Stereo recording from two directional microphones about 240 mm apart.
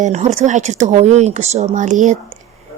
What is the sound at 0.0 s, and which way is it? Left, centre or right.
Speech, right.